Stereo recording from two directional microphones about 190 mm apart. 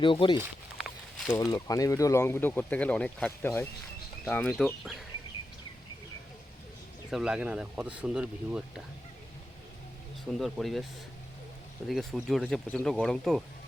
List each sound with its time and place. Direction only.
0.0 s speech: 25° left (ahead or behind)
0.8 s walk: centre (ahead or behind)
1.3 s speech: 15° left (ahead or behind); by 5.0 s centre (ahead or behind)
7.1 s speech: 5° right (ahead or behind)
10.3 s speech: centre (ahead or behind)
11.9 s speech: centre (ahead or behind)